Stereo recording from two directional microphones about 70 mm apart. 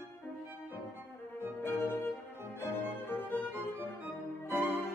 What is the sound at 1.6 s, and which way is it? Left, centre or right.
Music, left.